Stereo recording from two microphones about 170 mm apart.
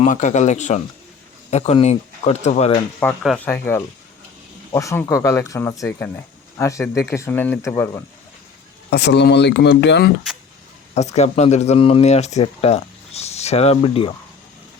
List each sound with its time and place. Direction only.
0.0 s speech: 45° left (ahead or behind)
3.2 s speech: 10° left (ahead or behind)
8.9 s speech: 85° left
10.9 s speech: 40° left (ahead or behind)